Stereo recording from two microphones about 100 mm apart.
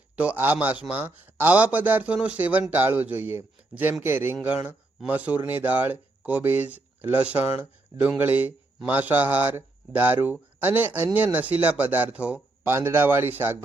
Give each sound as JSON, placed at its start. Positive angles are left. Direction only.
{"t": 0.2, "sound": "a man's voice", "side_deg": -15}
{"t": 12.7, "sound": "speech", "side_deg": -25}